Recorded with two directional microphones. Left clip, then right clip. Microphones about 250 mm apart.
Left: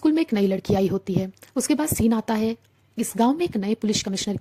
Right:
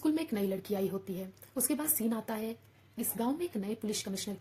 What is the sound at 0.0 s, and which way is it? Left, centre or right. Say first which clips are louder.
A woman's voice: left 11 dB; left.